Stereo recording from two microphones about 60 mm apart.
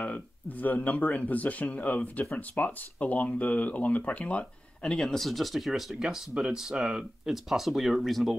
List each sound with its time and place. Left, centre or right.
0.0 s speech: left
4.8 s speech: centre